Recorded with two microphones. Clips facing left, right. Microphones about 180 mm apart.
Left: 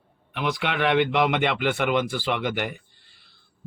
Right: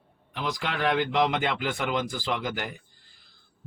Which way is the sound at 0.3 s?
65° left (ahead or behind).